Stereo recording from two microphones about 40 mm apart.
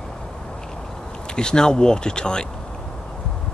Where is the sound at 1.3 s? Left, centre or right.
Centre.